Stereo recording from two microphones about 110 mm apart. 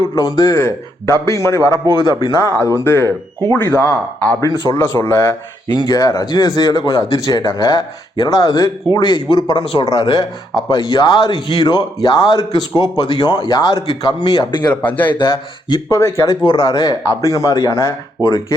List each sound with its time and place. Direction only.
0.2 s a man's voice: 35° left (ahead or behind)
2.0 s speech: 35° right (ahead or behind)
2.6 s a man's voice: 25° left (ahead or behind)
5.6 s speech: 40° left (ahead or behind)
9.8 s speech: 35° left (ahead or behind)
14.7 s speech: 15° left (ahead or behind)
15.2 s speech: 40° left (ahead or behind)
16.0 s a man's voice: 25° left (ahead or behind)
16.4 s speech: 40° left (ahead or behind)